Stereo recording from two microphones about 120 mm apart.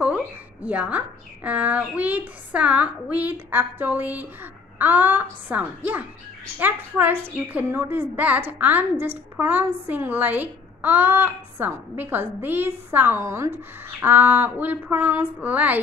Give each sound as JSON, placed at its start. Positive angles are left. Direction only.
{"t": 0.0, "sound": "a woman's voice", "side_deg": -10}